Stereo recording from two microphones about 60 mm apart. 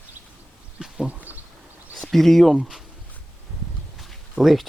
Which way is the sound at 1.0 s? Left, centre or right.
Right.